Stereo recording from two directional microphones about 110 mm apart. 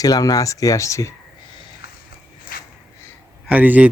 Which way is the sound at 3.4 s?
15° right (ahead or behind).